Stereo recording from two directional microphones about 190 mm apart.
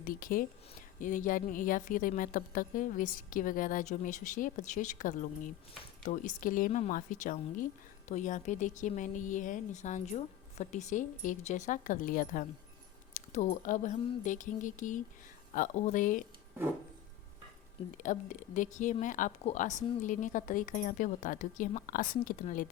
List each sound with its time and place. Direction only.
0.0 s speech: 50° left (ahead or behind)
17.9 s speech: 45° left (ahead or behind)